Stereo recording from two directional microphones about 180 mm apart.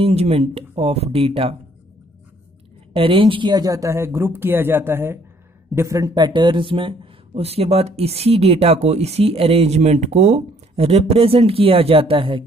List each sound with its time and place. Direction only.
0.0 s speech: 35° right (ahead or behind)
2.9 s speech: 30° right (ahead or behind)